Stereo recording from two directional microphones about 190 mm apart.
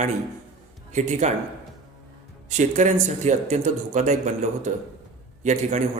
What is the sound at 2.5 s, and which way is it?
A man's voice, 40° right (ahead or behind).